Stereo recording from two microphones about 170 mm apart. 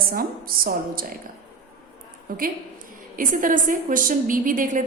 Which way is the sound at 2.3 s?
55° right (ahead or behind).